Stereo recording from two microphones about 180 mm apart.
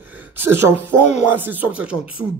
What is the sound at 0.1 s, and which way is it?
Speech, 10° right (ahead or behind).